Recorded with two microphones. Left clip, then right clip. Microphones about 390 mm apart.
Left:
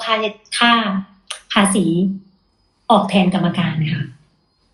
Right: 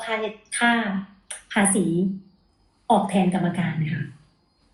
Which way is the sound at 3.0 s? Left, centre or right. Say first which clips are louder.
Left 6 dB; left.